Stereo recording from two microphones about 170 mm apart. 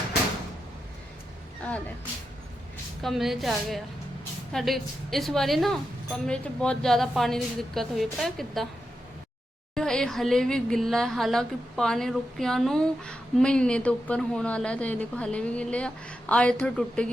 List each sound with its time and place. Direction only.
3.0 s speech: centre (ahead or behind)
9.7 s speech: 5° left (ahead or behind)